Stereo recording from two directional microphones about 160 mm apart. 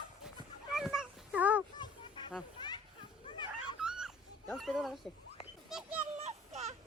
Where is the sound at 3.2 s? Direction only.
30° left (ahead or behind).